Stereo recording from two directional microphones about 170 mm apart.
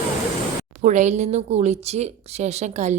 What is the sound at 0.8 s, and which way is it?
Speech, 45° right (ahead or behind).